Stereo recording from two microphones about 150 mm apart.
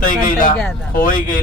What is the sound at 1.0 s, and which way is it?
Speech, 65° left (ahead or behind).